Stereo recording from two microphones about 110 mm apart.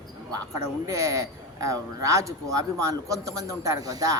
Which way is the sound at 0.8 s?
30° right (ahead or behind).